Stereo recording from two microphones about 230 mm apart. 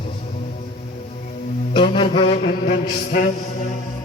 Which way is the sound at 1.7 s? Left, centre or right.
Left.